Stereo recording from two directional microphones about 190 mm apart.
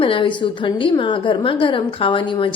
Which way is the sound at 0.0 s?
25° left (ahead or behind).